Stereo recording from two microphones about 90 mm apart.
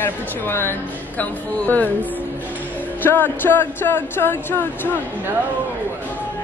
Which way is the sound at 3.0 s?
20° left (ahead or behind).